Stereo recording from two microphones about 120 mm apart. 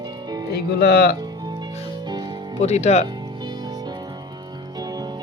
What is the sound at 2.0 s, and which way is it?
Music, 35° right (ahead or behind).